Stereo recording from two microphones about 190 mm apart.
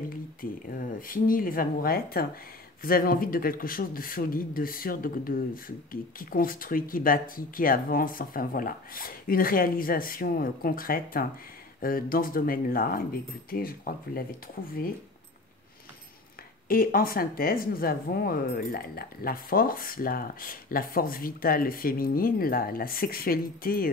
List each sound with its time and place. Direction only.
0.4 s speech: 50° left (ahead or behind)
16.6 s speech: 50° left (ahead or behind)